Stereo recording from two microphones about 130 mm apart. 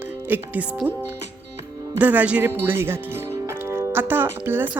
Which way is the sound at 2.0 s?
15° right (ahead or behind).